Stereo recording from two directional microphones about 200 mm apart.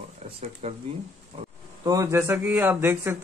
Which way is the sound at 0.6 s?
30° right (ahead or behind).